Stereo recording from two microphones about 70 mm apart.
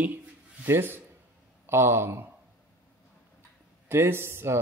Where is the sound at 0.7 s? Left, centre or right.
Right.